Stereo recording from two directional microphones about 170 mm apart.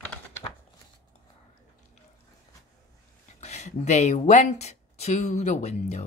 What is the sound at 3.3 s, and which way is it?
A woman's voice, 40° left (ahead or behind).